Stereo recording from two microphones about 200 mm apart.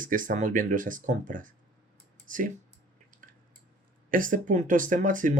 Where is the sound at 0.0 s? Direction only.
40° right (ahead or behind).